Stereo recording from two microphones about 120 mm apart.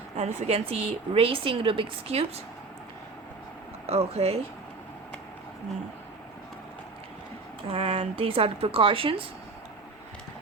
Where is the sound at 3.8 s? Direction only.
60° right (ahead or behind).